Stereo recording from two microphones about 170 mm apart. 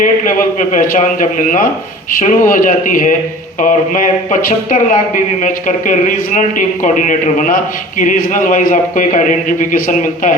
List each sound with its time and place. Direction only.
0.0 s speech: 50° left (ahead or behind)